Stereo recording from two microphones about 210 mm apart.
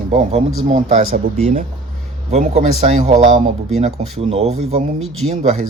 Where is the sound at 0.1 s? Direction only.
30° right (ahead or behind).